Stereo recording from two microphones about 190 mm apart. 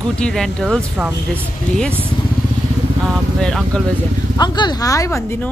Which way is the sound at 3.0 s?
5° left (ahead or behind).